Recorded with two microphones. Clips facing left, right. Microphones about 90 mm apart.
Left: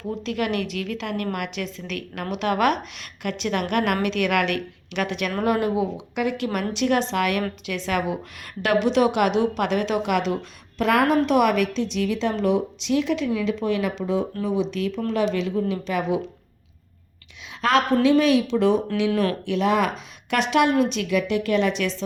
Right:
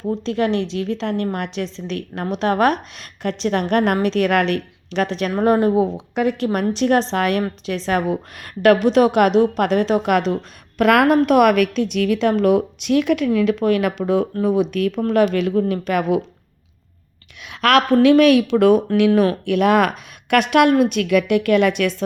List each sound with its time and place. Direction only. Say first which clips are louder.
0.3 s a woman's voice: right 5 dB; 30° right (ahead or behind)
10.8 s a woman's voice: right 5 dB; 60° right (ahead or behind)
17.5 s a woman's voice: right 5 dB; 70° right (ahead or behind)